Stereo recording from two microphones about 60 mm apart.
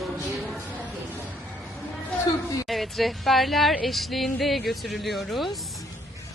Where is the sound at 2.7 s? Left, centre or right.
Centre.